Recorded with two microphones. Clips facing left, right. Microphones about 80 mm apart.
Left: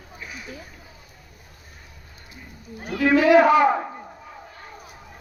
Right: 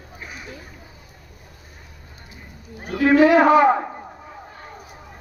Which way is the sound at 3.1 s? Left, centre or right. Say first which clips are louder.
Right 2 dB; right.